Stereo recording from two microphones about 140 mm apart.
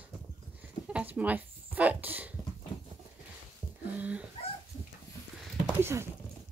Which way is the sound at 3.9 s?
10° right (ahead or behind).